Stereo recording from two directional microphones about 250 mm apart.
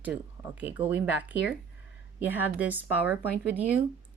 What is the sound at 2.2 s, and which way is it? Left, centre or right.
Speech, centre.